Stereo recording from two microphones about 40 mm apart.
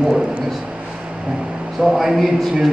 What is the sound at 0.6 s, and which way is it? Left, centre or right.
Vehicle, right.